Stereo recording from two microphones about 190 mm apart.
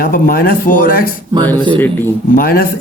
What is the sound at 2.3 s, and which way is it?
Speech, 50° left (ahead or behind).